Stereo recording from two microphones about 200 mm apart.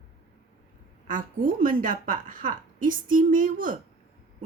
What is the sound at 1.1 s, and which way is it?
Speech, 45° right (ahead or behind).